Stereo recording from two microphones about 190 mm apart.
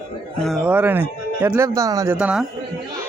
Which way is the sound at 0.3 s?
Centre (ahead or behind).